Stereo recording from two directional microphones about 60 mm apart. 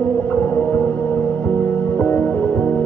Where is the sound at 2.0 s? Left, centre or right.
Left.